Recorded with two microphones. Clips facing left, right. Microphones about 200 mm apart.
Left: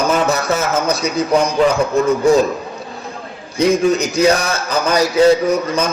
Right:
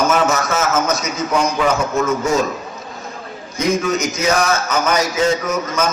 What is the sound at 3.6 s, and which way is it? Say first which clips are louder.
A man's voice: left 4 dB; 35° left (ahead or behind).